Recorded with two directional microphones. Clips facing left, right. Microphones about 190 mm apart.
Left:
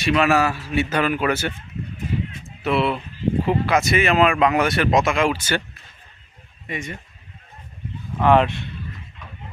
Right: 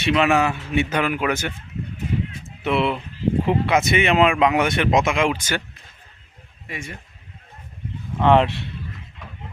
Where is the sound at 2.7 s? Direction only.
20° right (ahead or behind).